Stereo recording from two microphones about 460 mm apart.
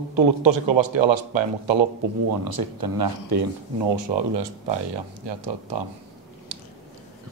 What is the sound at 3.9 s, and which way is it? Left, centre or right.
Speech, right.